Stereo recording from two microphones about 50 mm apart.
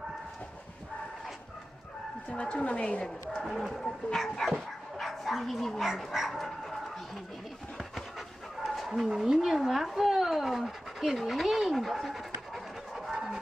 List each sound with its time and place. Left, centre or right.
2.2 s speech: left
3.4 s speech: centre
4.9 s dog: centre
5.9 s speech: centre
8.6 s dog: centre
8.9 s speech: centre